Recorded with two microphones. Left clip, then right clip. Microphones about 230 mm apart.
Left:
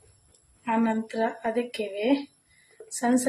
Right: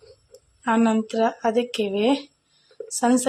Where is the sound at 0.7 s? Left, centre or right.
Centre.